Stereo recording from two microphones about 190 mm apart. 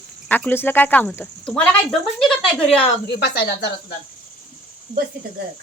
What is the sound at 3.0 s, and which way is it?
Speech, 60° left (ahead or behind).